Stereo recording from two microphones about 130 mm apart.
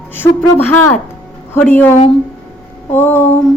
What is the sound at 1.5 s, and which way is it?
A woman's voice, 15° left (ahead or behind).